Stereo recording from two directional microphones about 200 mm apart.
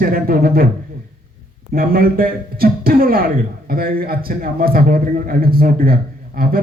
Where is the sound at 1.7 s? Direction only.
45° right (ahead or behind).